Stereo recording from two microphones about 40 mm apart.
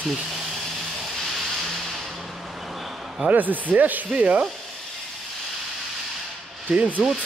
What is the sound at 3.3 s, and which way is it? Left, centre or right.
Speech, right.